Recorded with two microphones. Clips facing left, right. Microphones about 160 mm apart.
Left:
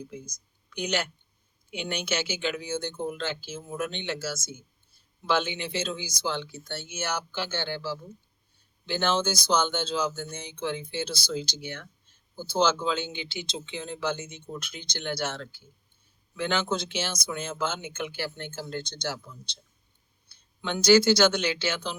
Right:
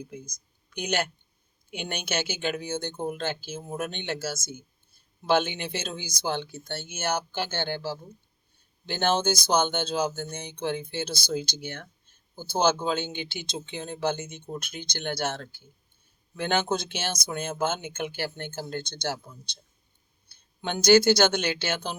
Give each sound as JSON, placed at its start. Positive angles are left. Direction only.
{"t": 0.1, "sound": "speech", "side_deg": -50}